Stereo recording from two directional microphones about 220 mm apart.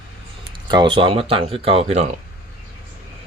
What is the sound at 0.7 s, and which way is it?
Speech, 20° right (ahead or behind).